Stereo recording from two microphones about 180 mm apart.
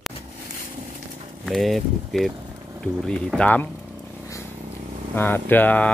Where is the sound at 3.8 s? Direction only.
5° right (ahead or behind).